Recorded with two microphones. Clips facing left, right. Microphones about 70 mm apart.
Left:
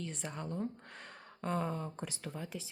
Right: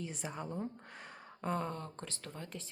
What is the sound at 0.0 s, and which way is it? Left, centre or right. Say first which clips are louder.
Speech: even; centre.